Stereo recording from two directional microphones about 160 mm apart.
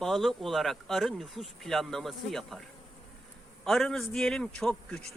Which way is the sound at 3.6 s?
5° left (ahead or behind).